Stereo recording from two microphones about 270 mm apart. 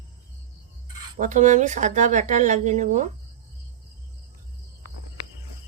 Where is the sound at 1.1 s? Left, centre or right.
Right.